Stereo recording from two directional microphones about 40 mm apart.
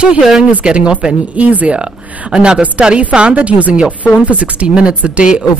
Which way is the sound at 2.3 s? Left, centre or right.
Right.